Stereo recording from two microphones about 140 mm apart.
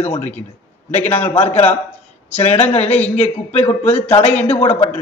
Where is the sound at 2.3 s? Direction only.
50° left (ahead or behind).